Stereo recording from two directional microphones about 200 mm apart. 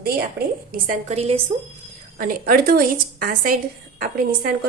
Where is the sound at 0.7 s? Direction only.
40° right (ahead or behind).